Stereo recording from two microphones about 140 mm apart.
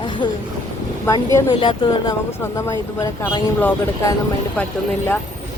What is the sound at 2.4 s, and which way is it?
Speech, 20° left (ahead or behind).